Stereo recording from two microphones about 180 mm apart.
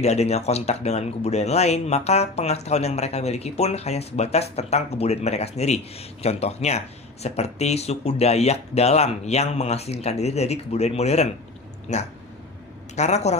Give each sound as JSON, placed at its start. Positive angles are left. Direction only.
{"t": 0.0, "sound": "speech", "side_deg": 35}